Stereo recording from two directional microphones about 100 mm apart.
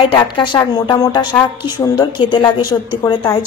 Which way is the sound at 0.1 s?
50° left (ahead or behind).